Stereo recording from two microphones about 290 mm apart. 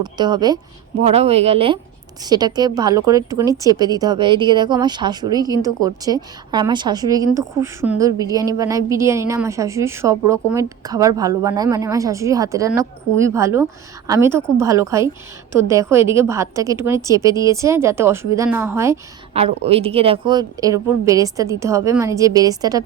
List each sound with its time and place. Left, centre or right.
0.0 s a woman's voice: centre
19.3 s a woman's voice: right